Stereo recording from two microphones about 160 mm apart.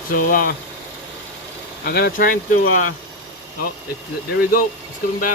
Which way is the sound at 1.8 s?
90° left.